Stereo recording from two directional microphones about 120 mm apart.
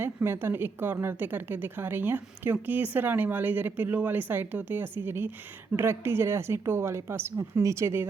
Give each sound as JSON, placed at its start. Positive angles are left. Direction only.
{"t": 0.0, "sound": "a woman's voice", "side_deg": -20}